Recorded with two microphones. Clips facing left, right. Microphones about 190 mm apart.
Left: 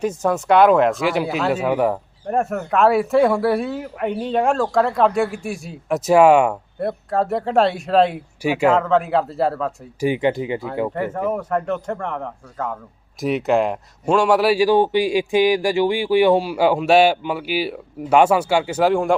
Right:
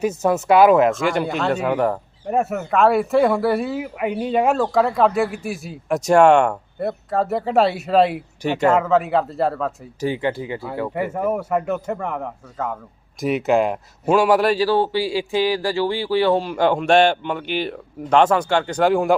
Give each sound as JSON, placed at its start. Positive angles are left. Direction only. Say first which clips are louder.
{"t": 0.0, "sound": "speech", "louder": "right 1 dB", "side_deg": -5}
{"t": 8.4, "sound": "a man's voice", "louder": "left 1 dB", "side_deg": 10}
{"t": 8.7, "sound": "speech", "louder": "even", "side_deg": -5}
{"t": 10.0, "sound": "a man's voice", "louder": "left 3 dB", "side_deg": 15}
{"t": 10.9, "sound": "a man's voice", "louder": "right 1 dB", "side_deg": -10}